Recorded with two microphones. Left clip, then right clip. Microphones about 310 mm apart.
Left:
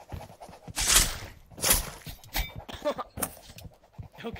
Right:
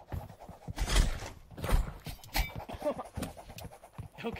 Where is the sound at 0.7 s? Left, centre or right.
Left.